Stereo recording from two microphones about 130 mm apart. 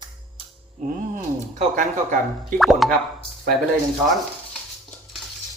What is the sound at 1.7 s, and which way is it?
Speech, 75° right (ahead or behind).